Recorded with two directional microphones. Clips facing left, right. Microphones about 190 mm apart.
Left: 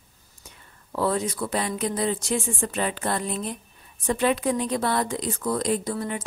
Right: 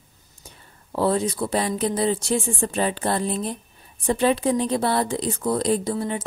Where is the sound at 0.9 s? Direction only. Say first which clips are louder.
Right 3 dB; 30° right (ahead or behind).